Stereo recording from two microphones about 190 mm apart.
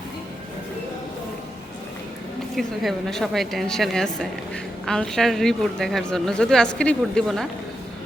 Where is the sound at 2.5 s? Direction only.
Centre (ahead or behind).